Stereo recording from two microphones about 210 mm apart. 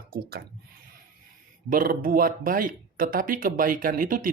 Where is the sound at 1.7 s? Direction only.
40° right (ahead or behind).